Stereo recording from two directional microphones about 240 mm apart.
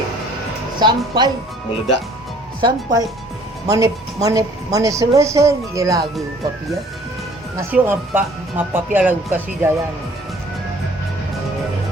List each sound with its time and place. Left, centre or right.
0.8 s a woman's voice: centre
2.6 s a woman's voice: centre
7.5 s a woman's voice: centre